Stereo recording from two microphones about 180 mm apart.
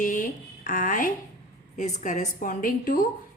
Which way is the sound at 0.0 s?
45° left (ahead or behind).